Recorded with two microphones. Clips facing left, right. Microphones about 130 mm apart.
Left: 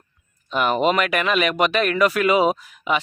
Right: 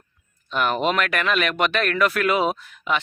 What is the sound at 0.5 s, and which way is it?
Speech, 5° left (ahead or behind).